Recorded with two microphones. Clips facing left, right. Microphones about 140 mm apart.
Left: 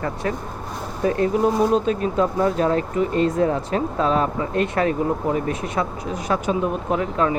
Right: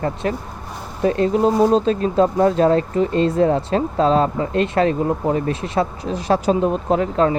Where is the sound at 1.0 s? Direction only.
25° right (ahead or behind).